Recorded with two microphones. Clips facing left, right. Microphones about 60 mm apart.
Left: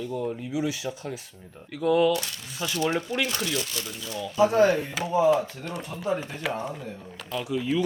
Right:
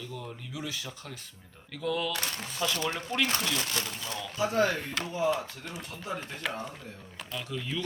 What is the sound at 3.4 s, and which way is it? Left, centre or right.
Speech, right.